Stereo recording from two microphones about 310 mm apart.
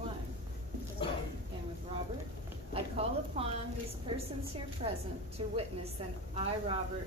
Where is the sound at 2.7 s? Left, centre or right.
Centre.